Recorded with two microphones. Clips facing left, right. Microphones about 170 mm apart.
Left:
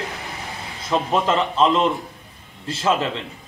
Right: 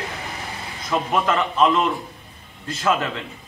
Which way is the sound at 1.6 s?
25° left (ahead or behind).